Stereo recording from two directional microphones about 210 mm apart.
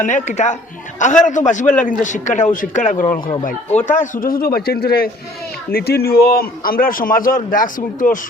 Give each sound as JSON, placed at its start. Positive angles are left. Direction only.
{"t": 0.0, "sound": "a man's voice", "side_deg": 35}